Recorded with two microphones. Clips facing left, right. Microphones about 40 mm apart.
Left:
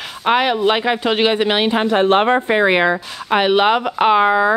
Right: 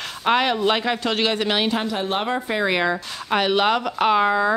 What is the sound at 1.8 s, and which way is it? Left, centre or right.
Speech, left.